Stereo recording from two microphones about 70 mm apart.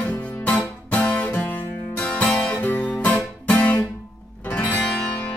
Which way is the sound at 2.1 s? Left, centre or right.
Centre.